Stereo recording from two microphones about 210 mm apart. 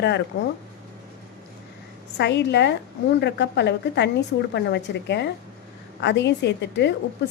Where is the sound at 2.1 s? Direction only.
55° left (ahead or behind).